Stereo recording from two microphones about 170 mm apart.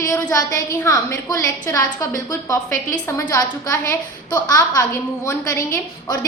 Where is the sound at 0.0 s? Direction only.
20° left (ahead or behind).